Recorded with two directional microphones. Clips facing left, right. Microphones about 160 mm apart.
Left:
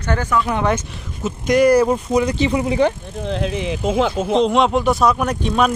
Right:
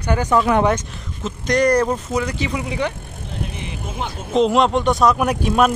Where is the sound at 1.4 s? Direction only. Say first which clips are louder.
Left 3 dB; 5° left (ahead or behind).